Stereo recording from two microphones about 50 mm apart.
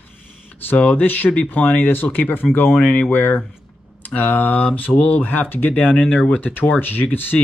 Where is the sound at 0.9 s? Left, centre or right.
Left.